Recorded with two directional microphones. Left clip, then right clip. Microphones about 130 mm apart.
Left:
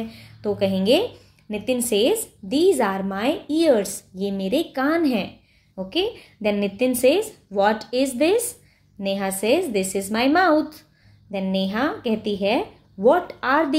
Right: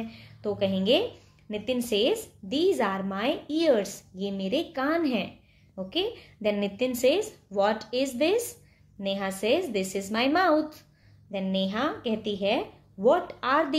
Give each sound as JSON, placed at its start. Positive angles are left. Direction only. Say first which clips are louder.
{"t": 0.1, "sound": "a woman's voice", "louder": "left 6 dB", "side_deg": 25}